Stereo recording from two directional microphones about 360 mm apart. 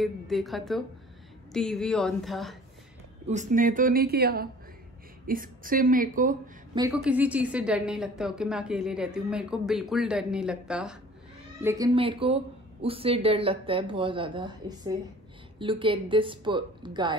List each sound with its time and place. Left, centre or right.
0.0 s a woman's voice: centre
3.3 s a woman's voice: centre
6.8 s a woman's voice: centre